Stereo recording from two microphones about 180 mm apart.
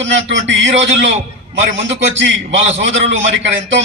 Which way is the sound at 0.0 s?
85° right.